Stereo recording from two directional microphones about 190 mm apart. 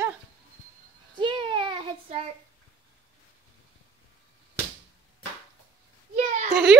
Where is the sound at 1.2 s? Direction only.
25° right (ahead or behind).